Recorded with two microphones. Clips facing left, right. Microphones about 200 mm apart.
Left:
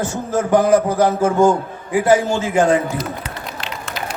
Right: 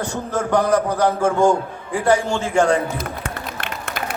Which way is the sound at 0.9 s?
5° left (ahead or behind).